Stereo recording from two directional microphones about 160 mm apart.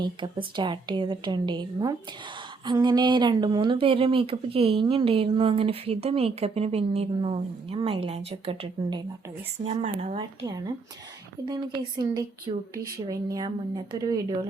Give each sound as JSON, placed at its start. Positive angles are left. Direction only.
{"t": 0.0, "sound": "a woman's voice", "side_deg": -30}
{"t": 9.6, "sound": "speech", "side_deg": -45}
{"t": 10.2, "sound": "a woman's voice", "side_deg": -25}